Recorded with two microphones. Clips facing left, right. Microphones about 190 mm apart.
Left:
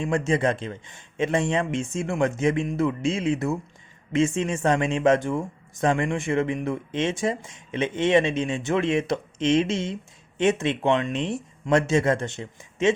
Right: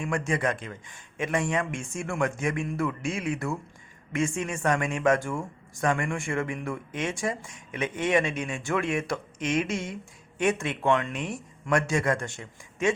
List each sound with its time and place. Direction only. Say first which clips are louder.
0.0 s speech: left 5 dB; 25° left (ahead or behind)